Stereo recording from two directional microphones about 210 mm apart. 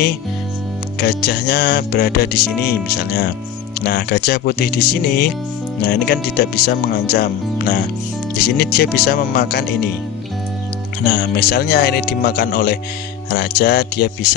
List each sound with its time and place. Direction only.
0.9 s speech: 50° left (ahead or behind)
3.8 s speech: 50° left (ahead or behind)
11.1 s speech: 50° left (ahead or behind)